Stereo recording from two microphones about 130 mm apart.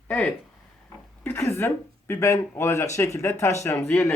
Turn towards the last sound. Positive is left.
turn(degrees=15)  # may be behind; listen again after turning